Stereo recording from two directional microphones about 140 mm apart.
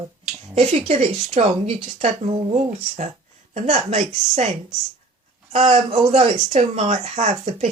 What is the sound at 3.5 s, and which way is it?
Speech, 55° right (ahead or behind).